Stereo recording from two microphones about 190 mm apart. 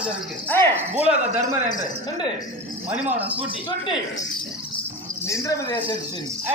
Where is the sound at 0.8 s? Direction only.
10° right (ahead or behind).